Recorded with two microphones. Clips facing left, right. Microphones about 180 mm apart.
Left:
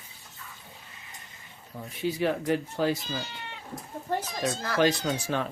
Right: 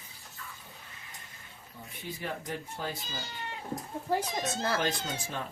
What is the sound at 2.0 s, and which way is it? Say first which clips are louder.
Speech: left 11 dB; 90° left.